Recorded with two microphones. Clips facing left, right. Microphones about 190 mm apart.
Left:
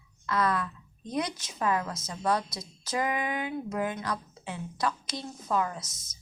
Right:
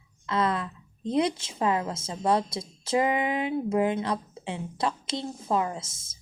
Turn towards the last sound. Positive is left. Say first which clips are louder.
# right 4 dB
turn(degrees=-25)  # may be behind; listen again after turning